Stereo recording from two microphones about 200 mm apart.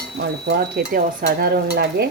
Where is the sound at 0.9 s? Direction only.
50° right (ahead or behind).